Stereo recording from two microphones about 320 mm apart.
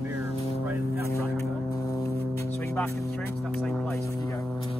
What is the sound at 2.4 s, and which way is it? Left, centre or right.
Music, centre.